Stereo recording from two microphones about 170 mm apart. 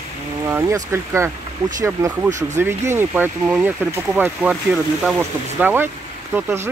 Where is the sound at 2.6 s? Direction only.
15° right (ahead or behind).